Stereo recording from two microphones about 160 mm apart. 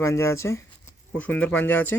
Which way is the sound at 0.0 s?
15° left (ahead or behind).